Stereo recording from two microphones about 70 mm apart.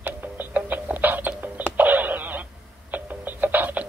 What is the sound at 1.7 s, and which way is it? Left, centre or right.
Radio, right.